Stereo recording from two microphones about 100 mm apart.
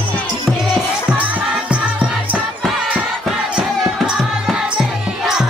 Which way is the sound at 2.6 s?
5° right (ahead or behind).